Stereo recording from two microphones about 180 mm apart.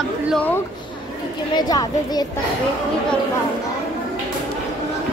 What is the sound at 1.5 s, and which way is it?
Speech, 20° left (ahead or behind).